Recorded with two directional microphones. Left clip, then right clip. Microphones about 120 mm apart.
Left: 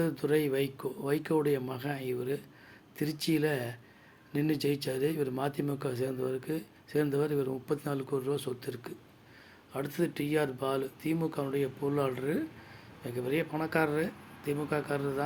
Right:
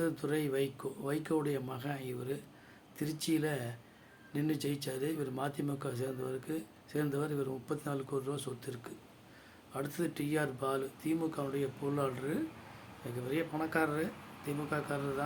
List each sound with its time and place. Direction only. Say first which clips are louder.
0.0 s speech: left 5 dB; 25° left (ahead or behind)